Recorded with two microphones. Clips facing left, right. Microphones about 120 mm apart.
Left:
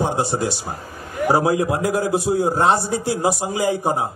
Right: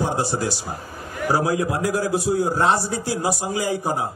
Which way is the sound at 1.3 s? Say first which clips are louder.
Left 3 dB; 25° left (ahead or behind).